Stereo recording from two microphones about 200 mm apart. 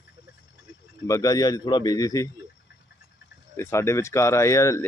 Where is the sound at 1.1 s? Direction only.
15° left (ahead or behind).